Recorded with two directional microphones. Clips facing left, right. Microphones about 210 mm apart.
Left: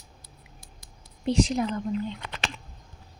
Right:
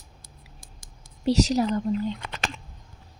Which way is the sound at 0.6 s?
50° right (ahead or behind).